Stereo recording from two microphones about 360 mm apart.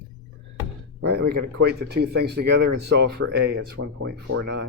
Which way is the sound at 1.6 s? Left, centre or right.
Right.